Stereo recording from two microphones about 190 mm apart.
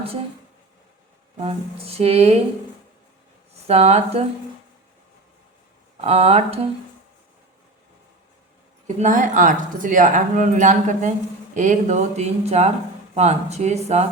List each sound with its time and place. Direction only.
1.4 s speech: 30° right (ahead or behind)
3.5 s speech: 35° right (ahead or behind)
6.0 s speech: 35° right (ahead or behind)
9.0 s speech: 40° right (ahead or behind)